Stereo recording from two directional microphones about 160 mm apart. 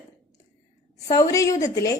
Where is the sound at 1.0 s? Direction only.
20° left (ahead or behind).